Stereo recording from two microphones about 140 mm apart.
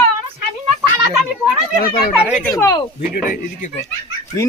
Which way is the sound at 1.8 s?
90° left.